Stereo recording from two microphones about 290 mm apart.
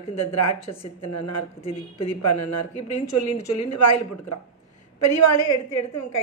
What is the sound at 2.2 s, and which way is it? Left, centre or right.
Speech, left.